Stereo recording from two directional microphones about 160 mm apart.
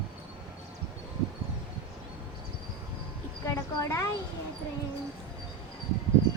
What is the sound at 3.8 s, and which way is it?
Speech, 20° left (ahead or behind).